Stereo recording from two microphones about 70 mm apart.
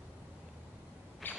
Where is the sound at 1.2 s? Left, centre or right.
Left.